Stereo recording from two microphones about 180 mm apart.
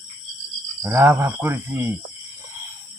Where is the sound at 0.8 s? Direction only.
15° right (ahead or behind).